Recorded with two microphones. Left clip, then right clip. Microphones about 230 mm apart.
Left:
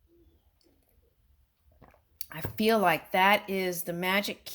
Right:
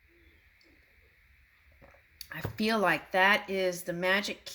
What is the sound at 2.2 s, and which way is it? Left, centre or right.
Speech, left.